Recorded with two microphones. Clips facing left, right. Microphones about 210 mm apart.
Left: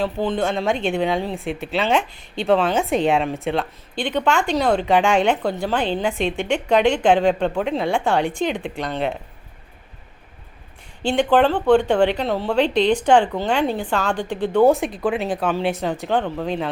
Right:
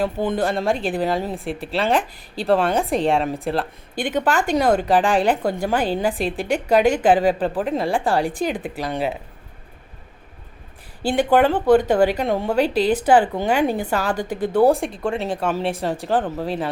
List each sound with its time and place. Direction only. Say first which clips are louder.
0.0 s a woman's voice: even; 10° right (ahead or behind)
6.3 s speech: even; 35° right (ahead or behind)
7.0 s a woman's voice: even; 5° right (ahead or behind)
8.2 s speech: left 1 dB; 35° right (ahead or behind)
8.4 s a woman's voice: even; 5° right (ahead or behind)
11.0 s a woman's voice: even; 5° right (ahead or behind)